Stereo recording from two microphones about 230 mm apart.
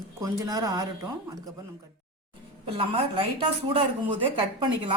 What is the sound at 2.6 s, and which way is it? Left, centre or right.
A woman's voice, right.